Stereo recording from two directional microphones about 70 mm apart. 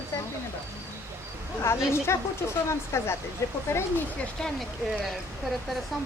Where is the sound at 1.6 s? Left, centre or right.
Left.